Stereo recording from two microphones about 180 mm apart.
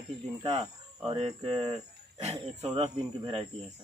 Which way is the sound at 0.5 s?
30° right (ahead or behind).